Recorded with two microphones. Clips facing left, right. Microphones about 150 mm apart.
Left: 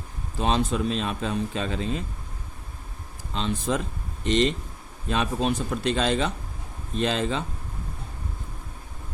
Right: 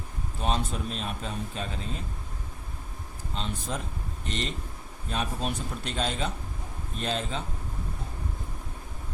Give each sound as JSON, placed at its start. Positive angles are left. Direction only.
{"t": 0.3, "sound": "a man's voice", "side_deg": 90}
{"t": 3.3, "sound": "a man's voice", "side_deg": 90}